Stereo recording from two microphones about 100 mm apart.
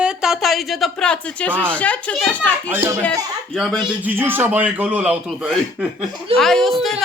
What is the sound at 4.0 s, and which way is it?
Speech, 20° right (ahead or behind).